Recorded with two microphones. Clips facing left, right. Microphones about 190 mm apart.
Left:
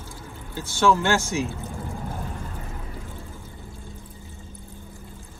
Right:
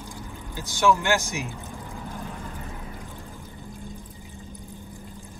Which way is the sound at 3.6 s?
15° right (ahead or behind).